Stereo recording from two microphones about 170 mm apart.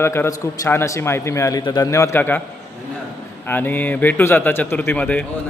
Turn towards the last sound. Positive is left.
turn(degrees=10)  # may be behind; listen again after turning